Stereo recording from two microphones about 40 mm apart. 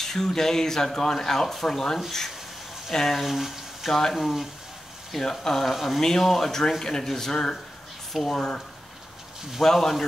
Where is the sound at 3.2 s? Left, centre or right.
Centre.